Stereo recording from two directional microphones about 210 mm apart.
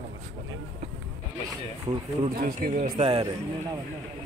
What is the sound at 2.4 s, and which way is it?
Speech, 40° right (ahead or behind).